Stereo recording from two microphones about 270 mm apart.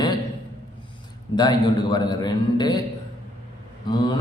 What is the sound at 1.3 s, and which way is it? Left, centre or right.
Speech, centre.